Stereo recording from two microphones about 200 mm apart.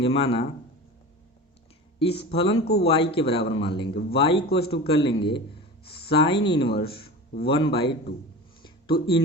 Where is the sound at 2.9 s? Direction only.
30° left (ahead or behind).